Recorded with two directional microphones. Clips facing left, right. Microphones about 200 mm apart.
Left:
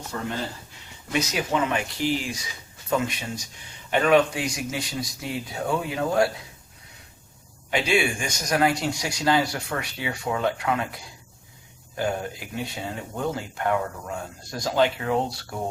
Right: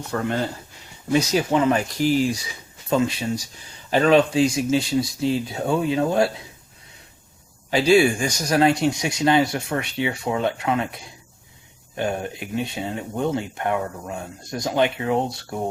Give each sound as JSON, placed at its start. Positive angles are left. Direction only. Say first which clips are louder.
{"t": 0.1, "sound": "speech", "louder": "right 6 dB", "side_deg": -60}
{"t": 1.1, "sound": "speech", "louder": "right 6 dB", "side_deg": -30}
{"t": 7.7, "sound": "speech", "louder": "right 7 dB", "side_deg": -35}